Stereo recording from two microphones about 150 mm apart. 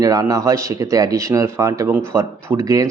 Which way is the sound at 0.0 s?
25° right (ahead or behind).